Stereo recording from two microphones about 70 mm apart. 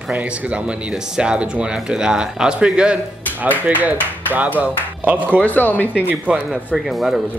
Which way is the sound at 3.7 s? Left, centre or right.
Right.